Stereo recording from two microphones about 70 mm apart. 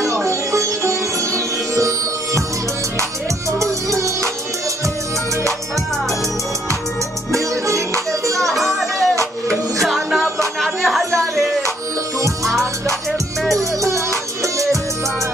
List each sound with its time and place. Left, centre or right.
0.0 s sitar: right
3.9 s music: right
7.3 s music: right
8.5 s music: centre
13.6 s music: right